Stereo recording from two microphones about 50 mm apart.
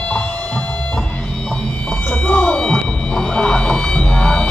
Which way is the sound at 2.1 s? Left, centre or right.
Left.